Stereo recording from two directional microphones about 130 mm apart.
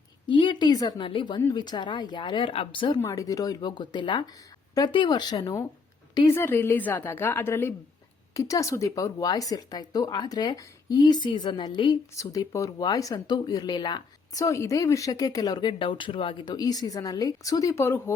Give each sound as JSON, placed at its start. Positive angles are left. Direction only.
{"t": 0.3, "sound": "speech", "side_deg": 40}
{"t": 3.0, "sound": "a woman's voice", "side_deg": 25}